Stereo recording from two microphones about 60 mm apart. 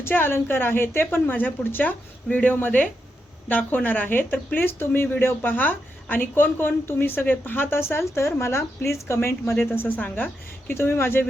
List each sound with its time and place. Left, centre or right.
0.0 s a woman's voice: left